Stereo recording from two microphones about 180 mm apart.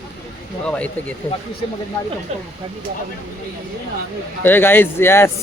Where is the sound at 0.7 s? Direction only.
5° left (ahead or behind).